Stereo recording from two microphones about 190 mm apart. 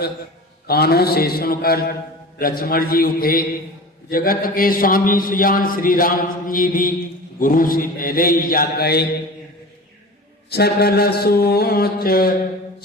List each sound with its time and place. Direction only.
0.7 s a man's voice: 55° left (ahead or behind)
10.5 s mantra: 55° left (ahead or behind)